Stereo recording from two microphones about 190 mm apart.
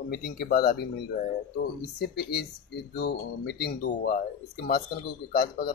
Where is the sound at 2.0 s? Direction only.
55° left (ahead or behind).